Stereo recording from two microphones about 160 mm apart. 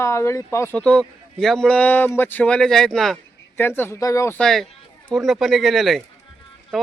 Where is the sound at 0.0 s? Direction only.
15° left (ahead or behind); by 3.2 s centre (ahead or behind).